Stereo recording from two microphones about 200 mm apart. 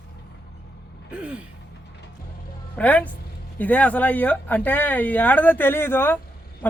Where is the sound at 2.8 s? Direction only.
5° left (ahead or behind).